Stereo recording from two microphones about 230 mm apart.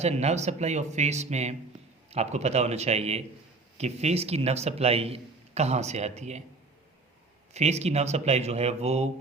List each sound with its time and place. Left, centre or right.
0.0 s a man's voice: right
7.5 s a man's voice: right